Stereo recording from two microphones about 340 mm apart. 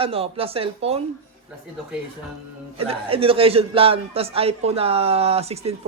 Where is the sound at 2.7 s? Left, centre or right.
Centre.